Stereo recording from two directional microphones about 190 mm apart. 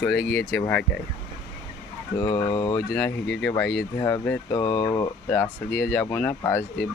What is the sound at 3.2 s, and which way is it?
Speech, 70° left (ahead or behind).